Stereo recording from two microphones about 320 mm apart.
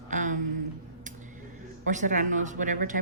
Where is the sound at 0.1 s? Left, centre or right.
Right.